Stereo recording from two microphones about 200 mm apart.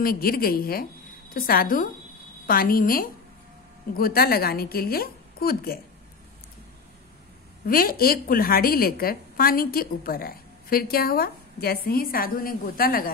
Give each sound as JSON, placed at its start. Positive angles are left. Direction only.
{"t": 0.0, "sound": "a woman's voice", "side_deg": 45}
{"t": 7.6, "sound": "a woman's voice", "side_deg": 45}